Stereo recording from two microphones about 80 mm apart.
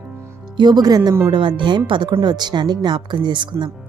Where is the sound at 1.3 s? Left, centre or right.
Right.